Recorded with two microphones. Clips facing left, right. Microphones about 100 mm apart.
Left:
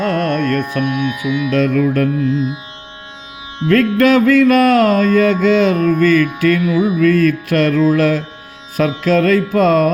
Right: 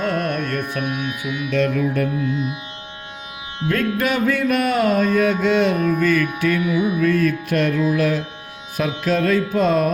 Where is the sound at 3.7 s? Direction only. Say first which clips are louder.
Left 9 dB; 90° left.